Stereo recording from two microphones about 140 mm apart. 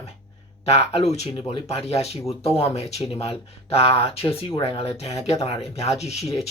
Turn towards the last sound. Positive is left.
turn(degrees=50)  # may be behind; listen again after turning